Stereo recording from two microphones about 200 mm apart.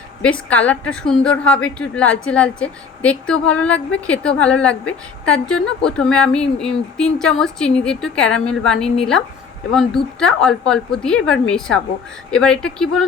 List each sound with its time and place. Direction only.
0.2 s a woman's voice: 5° left (ahead or behind)